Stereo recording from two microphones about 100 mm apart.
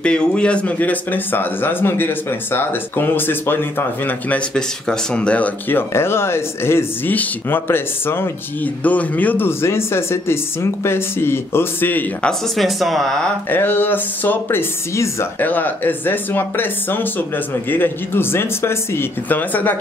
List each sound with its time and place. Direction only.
0.0 s speech: 10° left (ahead or behind)
4.6 s speech: 10° left (ahead or behind)
12.3 s speech: centre (ahead or behind)
13.5 s speech: 20° left (ahead or behind)